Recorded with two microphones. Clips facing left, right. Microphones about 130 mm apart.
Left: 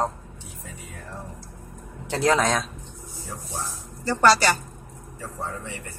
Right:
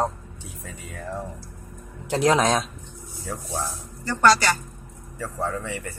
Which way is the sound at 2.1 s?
15° right (ahead or behind).